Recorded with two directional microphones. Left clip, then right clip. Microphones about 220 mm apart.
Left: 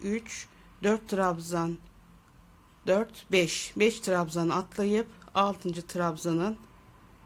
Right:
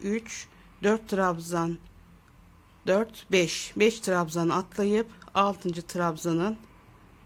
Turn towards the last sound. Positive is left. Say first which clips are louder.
# right 2 dB
turn(degrees=-10)  # may be behind; listen again after turning